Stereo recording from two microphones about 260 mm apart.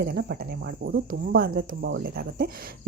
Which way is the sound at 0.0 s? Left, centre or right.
Right.